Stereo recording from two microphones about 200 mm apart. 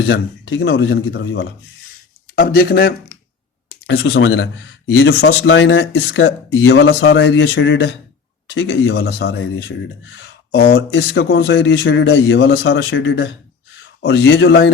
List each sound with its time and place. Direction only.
0.1 s speech: 60° left (ahead or behind)
3.8 s speech: 65° left (ahead or behind)
4.9 s speech: 80° left; by 9.3 s 55° left (ahead or behind)
10.5 s speech: 55° left (ahead or behind)